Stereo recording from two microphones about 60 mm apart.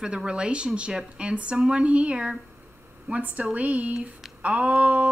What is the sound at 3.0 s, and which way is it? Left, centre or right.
Female singing, right.